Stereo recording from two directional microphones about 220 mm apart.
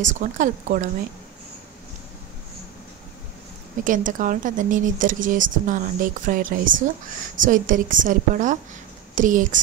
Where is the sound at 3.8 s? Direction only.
35° right (ahead or behind).